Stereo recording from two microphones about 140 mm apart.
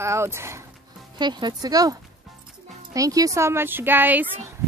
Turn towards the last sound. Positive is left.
turn(degrees=-15)  # may be behind; listen again after turning